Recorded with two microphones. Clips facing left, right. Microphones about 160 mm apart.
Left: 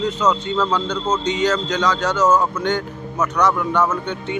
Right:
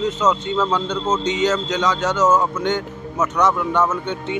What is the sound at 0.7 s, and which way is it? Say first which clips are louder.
A man's voice: even; 20° right (ahead or behind).